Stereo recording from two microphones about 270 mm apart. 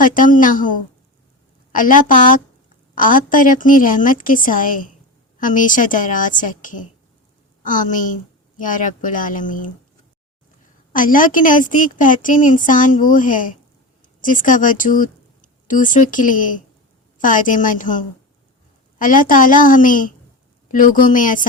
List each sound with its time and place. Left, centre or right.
0.0 s a woman's voice: left
1.7 s a woman's voice: left
10.9 s a woman's voice: left